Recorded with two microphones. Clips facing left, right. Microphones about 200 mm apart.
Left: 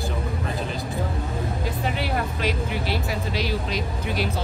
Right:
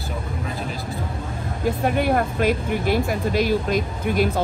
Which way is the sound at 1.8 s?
50° right (ahead or behind).